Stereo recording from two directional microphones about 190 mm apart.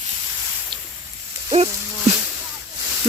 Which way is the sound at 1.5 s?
30° right (ahead or behind).